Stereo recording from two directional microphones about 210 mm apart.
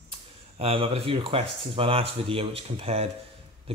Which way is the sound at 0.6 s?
25° right (ahead or behind).